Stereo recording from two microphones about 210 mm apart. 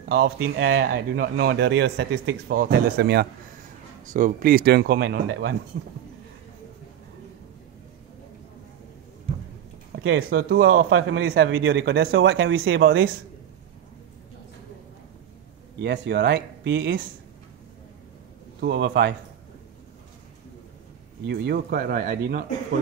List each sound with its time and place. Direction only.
0.4 s a man's voice: 60° right (ahead or behind)
0.8 s a man's voice: 45° right (ahead or behind)
4.0 s a man's voice: 40° right (ahead or behind); by 5.6 s 55° right (ahead or behind)
9.9 s a man's voice: 60° right (ahead or behind)
15.8 s a man's voice: 55° right (ahead or behind)
18.6 s a man's voice: 55° right (ahead or behind)
21.3 s a man's voice: 50° right (ahead or behind)